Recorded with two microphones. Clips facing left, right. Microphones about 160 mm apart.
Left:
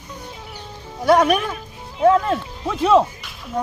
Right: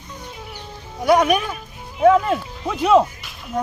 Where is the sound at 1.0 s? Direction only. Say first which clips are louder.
Left 1 dB; centre (ahead or behind).